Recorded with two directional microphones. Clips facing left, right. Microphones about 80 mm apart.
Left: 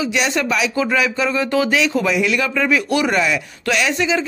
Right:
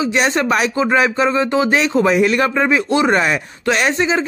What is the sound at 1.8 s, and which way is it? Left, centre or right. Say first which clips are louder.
A man's voice: right 4 dB; right.